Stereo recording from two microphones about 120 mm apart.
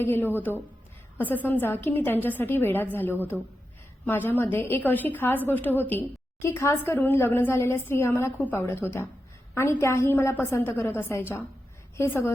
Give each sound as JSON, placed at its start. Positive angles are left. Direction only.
{"t": 0.0, "sound": "a woman's voice", "side_deg": 20}